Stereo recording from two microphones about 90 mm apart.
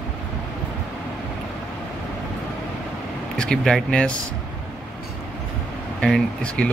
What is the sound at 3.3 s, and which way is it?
Speech, 10° left (ahead or behind).